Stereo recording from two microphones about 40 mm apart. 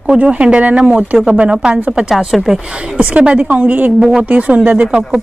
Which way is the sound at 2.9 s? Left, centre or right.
Right.